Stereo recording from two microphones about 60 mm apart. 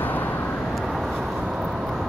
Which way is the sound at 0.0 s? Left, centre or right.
Left.